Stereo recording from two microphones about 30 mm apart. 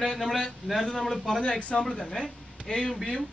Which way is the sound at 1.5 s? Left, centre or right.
Left.